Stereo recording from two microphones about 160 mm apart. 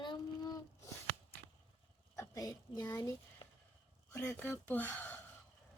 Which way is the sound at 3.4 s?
30° left (ahead or behind).